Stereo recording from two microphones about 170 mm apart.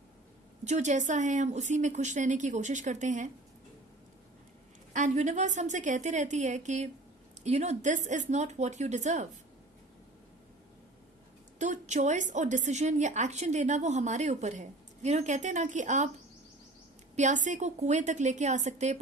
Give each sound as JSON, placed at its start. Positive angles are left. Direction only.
{"t": 0.6, "sound": "a woman's voice", "side_deg": -45}
{"t": 4.9, "sound": "a woman's voice", "side_deg": -45}
{"t": 11.6, "sound": "a woman's voice", "side_deg": -45}
{"t": 17.2, "sound": "a woman's voice", "side_deg": -45}